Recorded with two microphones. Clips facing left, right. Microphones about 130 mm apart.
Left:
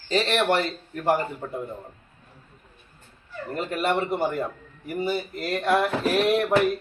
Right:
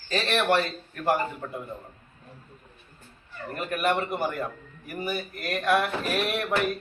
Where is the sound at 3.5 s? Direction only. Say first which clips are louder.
Left 1 dB; 25° left (ahead or behind).